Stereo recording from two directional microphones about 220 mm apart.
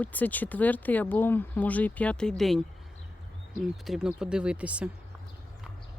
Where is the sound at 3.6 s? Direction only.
Centre (ahead or behind).